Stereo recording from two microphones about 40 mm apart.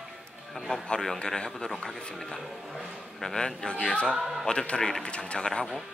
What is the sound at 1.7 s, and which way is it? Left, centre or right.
Speech, centre.